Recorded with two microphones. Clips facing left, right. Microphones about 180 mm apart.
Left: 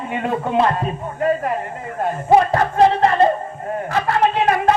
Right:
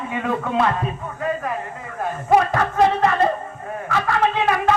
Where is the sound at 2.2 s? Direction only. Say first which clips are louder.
Left 3 dB; 30° left (ahead or behind).